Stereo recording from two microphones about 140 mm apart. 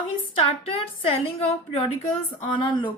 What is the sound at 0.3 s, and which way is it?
A woman's voice, 40° left (ahead or behind).